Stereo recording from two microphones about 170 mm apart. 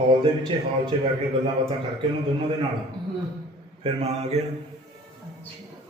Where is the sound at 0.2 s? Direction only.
30° right (ahead or behind).